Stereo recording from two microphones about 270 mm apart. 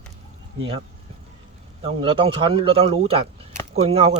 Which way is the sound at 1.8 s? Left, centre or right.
Centre.